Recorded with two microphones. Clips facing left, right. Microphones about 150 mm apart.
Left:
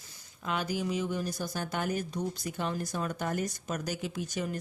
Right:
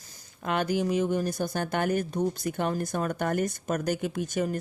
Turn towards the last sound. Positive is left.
turn(degrees=-50)  # may be behind; listen again after turning